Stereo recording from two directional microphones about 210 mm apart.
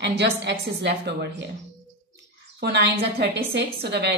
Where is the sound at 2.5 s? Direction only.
50° right (ahead or behind).